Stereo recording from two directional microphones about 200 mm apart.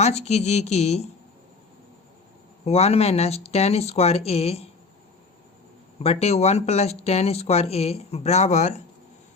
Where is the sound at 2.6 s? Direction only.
30° left (ahead or behind).